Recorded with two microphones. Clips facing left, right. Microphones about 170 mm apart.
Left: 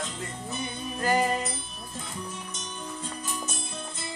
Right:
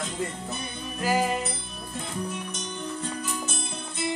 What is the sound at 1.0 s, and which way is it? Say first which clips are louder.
Music: even; 5° right (ahead or behind).